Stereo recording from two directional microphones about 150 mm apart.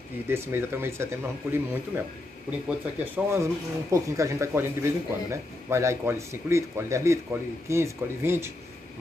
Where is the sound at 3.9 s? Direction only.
20° right (ahead or behind).